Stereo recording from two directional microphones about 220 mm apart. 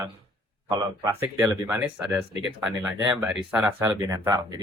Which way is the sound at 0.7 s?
15° right (ahead or behind).